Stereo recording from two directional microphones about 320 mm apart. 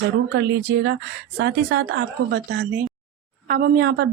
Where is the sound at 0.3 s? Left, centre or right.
Right.